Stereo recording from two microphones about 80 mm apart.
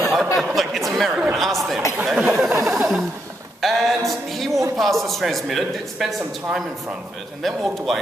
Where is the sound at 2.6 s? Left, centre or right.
Right.